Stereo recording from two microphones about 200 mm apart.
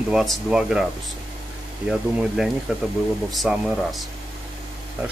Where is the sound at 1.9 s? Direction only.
Centre (ahead or behind).